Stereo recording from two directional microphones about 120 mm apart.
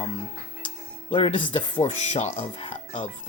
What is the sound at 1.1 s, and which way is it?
Speech, 50° left (ahead or behind).